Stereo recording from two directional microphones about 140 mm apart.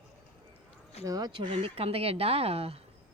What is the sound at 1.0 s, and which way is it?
Speech, 25° right (ahead or behind).